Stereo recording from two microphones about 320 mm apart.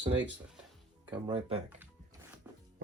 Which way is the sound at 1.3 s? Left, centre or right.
Centre.